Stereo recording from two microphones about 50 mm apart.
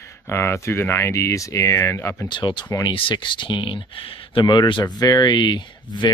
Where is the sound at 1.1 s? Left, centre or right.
Left.